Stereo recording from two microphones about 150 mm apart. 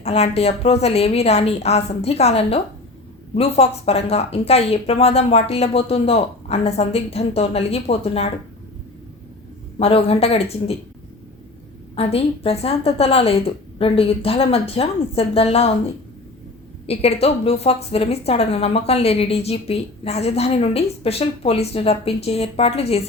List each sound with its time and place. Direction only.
0.0 s a woman's voice: 45° left (ahead or behind)
9.7 s a woman's voice: 40° left (ahead or behind)
11.9 s a woman's voice: 40° left (ahead or behind)
16.8 s a woman's voice: 40° left (ahead or behind)